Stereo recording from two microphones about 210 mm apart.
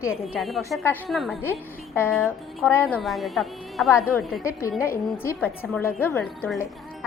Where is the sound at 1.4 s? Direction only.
10° left (ahead or behind).